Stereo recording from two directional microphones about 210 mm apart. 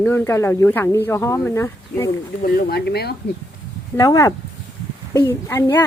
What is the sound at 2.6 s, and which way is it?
Speech, 50° left (ahead or behind).